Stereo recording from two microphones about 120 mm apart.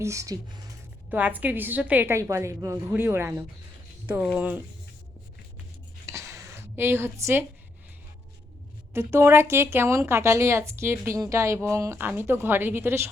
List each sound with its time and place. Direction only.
0.0 s speech: 25° right (ahead or behind)
1.1 s a woman's voice: 15° right (ahead or behind)
6.1 s a sound: 25° right (ahead or behind)
8.9 s speech: 20° right (ahead or behind)